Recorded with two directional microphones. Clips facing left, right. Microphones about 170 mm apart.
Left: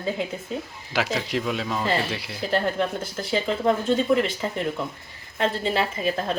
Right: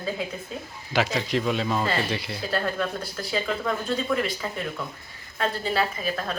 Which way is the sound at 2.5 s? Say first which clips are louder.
Left 3 dB; 25° left (ahead or behind).